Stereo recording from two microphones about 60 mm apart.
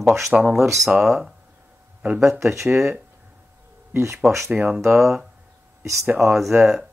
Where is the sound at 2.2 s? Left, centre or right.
Right.